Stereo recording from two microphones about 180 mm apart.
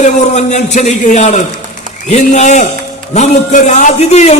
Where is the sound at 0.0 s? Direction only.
40° left (ahead or behind).